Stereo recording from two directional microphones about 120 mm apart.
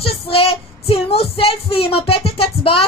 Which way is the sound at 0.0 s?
50° left (ahead or behind).